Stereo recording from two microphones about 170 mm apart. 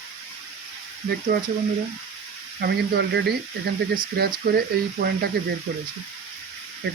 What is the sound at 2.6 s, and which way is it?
Speech, 75° right (ahead or behind).